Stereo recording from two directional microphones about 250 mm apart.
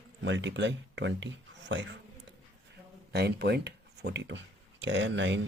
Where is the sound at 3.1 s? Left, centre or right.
Right.